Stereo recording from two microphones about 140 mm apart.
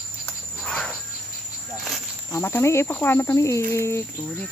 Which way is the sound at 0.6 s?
5° left (ahead or behind).